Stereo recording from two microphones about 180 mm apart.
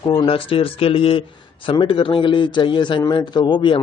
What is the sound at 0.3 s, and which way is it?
A man's voice, 30° left (ahead or behind).